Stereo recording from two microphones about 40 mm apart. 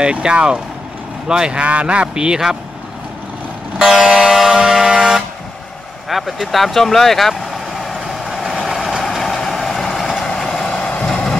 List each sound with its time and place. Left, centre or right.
0.0 s a man's voice: right
1.6 s a man's voice: right
3.7 s vehicle: centre
4.3 s a sound: centre
4.6 s air horn: centre
6.0 s vehicle: centre
9.1 s vehicle: centre